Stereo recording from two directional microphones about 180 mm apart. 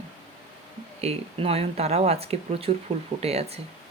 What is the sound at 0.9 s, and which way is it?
Speech, 35° right (ahead or behind).